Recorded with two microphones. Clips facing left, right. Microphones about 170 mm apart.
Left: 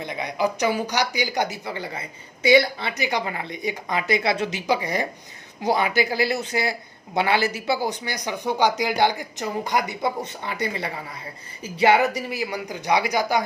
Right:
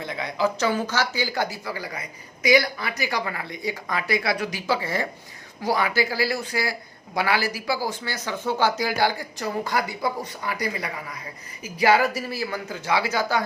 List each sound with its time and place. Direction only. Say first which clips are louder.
0.0 s speech: even; 20° left (ahead or behind)